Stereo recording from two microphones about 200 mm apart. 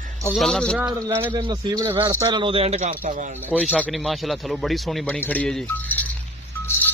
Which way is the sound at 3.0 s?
40° right (ahead or behind).